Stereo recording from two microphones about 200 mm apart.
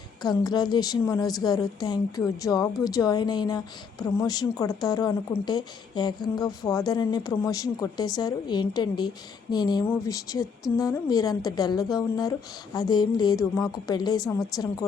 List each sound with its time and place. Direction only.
0.2 s a woman's voice: 20° left (ahead or behind)